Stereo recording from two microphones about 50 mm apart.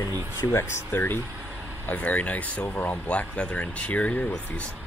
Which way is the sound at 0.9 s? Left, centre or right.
Left.